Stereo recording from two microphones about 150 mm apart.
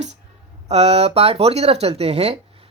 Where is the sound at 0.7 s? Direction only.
45° right (ahead or behind).